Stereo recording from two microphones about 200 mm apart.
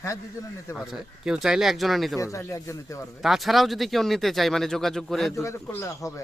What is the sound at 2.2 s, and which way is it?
Speech, 15° left (ahead or behind).